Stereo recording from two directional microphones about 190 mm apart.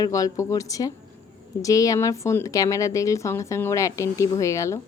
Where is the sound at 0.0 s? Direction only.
20° left (ahead or behind).